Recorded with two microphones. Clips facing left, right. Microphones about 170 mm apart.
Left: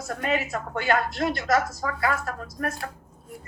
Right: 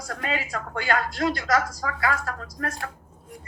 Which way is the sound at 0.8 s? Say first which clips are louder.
Left 2 dB; 55° left (ahead or behind).